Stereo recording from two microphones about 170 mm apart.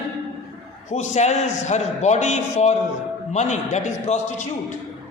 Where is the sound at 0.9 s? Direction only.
40° left (ahead or behind).